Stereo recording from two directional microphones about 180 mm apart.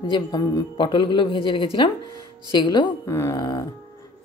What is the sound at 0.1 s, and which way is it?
Speech, 25° left (ahead or behind).